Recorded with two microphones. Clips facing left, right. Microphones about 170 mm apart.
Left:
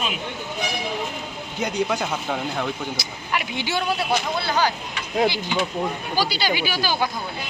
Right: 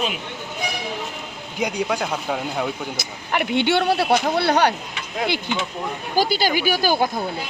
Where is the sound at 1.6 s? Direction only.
10° right (ahead or behind).